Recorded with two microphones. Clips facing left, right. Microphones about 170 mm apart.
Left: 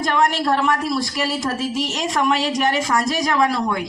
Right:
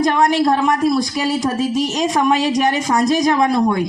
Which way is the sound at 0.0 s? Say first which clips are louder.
Right 5 dB; 15° right (ahead or behind).